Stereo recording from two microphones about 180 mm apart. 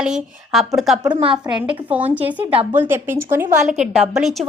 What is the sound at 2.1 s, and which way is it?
A woman's voice, 10° right (ahead or behind).